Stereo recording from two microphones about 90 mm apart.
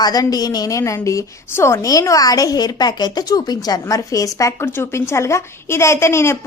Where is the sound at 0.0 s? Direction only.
45° left (ahead or behind).